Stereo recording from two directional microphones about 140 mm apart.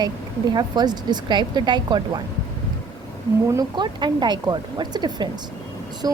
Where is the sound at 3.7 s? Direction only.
30° right (ahead or behind).